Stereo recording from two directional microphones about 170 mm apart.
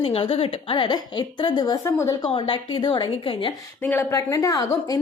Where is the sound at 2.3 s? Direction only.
30° left (ahead or behind).